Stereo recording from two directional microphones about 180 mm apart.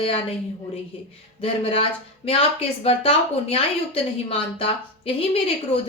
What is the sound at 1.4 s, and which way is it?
Speech, 30° left (ahead or behind).